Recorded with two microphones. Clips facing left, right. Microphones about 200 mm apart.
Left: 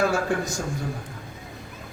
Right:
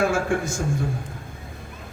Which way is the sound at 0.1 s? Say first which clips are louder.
Right 1 dB; 35° left (ahead or behind).